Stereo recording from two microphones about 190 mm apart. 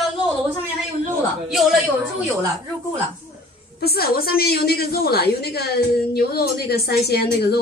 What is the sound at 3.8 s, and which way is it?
A woman's voice, 55° left (ahead or behind).